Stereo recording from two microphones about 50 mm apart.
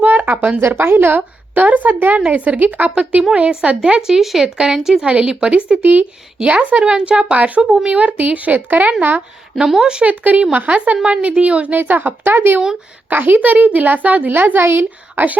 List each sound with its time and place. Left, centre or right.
0.0 s a sound: right
0.7 s a woman's voice: right; by 4.1 s centre
4.1 s speech: centre
5.0 s speech: right
5.8 s a woman's voice: right
7.6 s a woman's voice: centre; by 9.2 s right
9.6 s speech: centre
10.0 s a woman's voice: right
11.8 s a woman's voice: right
14.6 s speech: right